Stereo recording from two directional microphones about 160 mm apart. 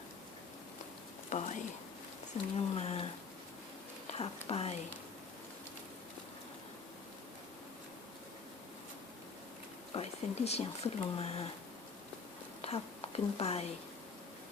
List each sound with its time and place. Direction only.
1.3 s speech: 45° left (ahead or behind)
4.4 s speech: 40° left (ahead or behind)
9.9 s speech: 40° left (ahead or behind)
12.6 s speech: 40° left (ahead or behind)